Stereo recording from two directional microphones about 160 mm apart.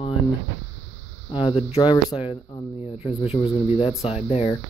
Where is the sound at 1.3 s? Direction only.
35° left (ahead or behind).